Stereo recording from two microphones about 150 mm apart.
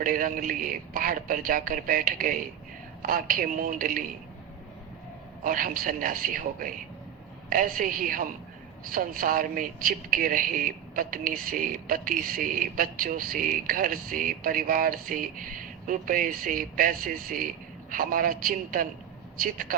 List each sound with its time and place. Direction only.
0.0 s speech: 65° right (ahead or behind)
5.4 s speech: 65° right (ahead or behind)